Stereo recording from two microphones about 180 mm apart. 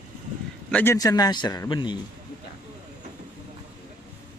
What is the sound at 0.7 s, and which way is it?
Speech, 5° left (ahead or behind).